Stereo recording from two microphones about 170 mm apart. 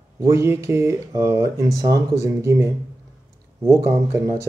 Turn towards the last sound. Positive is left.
turn(degrees=-15)  # may be behind; listen again after turning